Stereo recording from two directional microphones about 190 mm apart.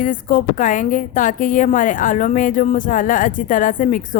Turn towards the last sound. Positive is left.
turn(degrees=40)  # may be behind; listen again after turning